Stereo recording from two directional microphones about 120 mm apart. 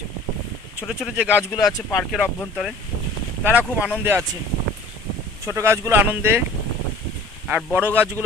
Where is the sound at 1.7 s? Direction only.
30° left (ahead or behind).